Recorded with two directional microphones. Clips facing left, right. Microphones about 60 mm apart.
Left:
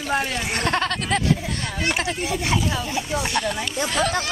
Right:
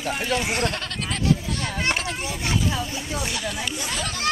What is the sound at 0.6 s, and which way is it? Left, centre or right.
Speech, left.